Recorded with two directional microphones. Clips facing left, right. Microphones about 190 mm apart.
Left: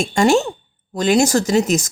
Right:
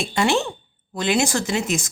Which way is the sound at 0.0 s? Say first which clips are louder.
Left 6 dB; 45° left (ahead or behind).